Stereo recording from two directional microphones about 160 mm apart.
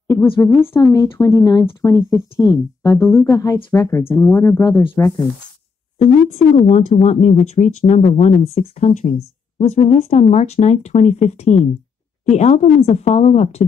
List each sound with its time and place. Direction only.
0.4 s speech: 15° left (ahead or behind)
5.9 s speech: 40° left (ahead or behind)